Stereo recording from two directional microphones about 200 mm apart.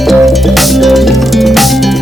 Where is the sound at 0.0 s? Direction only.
Centre (ahead or behind).